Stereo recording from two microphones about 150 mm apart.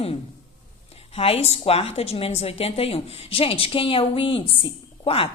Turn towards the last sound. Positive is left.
turn(degrees=40)  # may be behind; listen again after turning